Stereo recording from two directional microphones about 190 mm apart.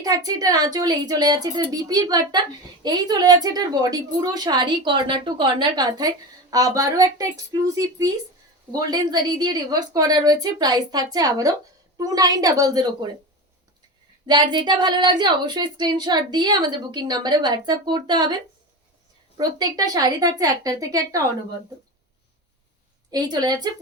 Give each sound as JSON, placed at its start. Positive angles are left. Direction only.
{"t": 0.0, "sound": "a woman's voice", "side_deg": -20}
{"t": 14.3, "sound": "a woman's voice", "side_deg": -25}
{"t": 23.1, "sound": "a woman's voice", "side_deg": -20}